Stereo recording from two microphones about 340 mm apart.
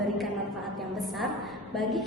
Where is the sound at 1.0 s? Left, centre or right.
Centre.